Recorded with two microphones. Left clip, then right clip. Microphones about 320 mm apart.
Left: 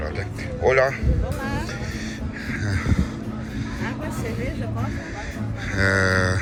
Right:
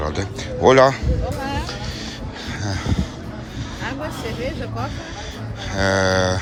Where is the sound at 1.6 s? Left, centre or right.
Centre.